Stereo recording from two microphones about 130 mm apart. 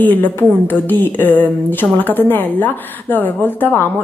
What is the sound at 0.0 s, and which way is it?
A woman's voice, 15° left (ahead or behind).